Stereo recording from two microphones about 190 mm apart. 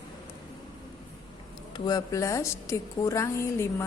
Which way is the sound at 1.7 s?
20° left (ahead or behind).